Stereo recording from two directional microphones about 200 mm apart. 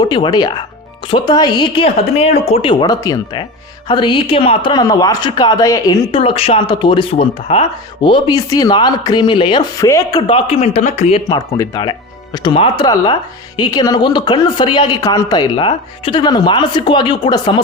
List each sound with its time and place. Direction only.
0.0 s speech: 20° left (ahead or behind)
11.3 s speech: 20° left (ahead or behind)